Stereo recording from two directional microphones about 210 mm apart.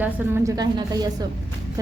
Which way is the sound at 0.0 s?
10° right (ahead or behind).